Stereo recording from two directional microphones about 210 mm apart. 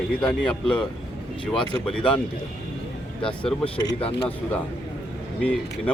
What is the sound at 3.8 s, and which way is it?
Speech, 25° left (ahead or behind).